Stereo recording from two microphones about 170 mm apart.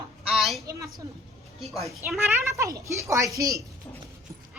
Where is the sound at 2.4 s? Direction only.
15° right (ahead or behind).